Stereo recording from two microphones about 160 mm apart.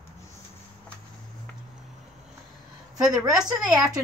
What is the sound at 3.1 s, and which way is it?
Speech, 5° right (ahead or behind).